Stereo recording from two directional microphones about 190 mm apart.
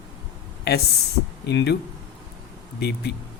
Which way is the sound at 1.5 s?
60° left (ahead or behind).